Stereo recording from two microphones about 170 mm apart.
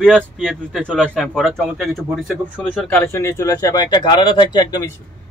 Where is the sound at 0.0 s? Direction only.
Centre (ahead or behind); by 4.8 s 25° left (ahead or behind).